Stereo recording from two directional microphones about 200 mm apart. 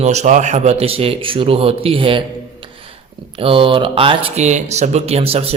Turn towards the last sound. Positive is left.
turn(degrees=-30)  # may be behind; listen again after turning